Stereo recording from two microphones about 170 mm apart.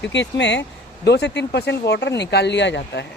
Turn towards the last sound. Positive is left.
turn(degrees=90)